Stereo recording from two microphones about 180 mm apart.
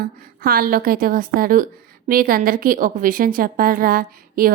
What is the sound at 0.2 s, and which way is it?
A woman's voice, 55° right (ahead or behind).